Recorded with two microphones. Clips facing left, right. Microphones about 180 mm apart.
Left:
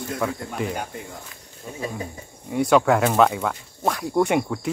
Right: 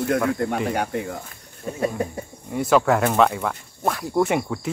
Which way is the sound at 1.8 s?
60° right (ahead or behind).